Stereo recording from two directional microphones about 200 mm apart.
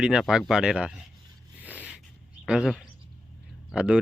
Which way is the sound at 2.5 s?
5° right (ahead or behind).